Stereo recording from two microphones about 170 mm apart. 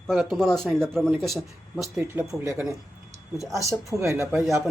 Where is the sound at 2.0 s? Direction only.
15° right (ahead or behind).